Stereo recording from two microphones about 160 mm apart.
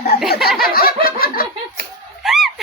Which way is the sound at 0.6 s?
65° left (ahead or behind).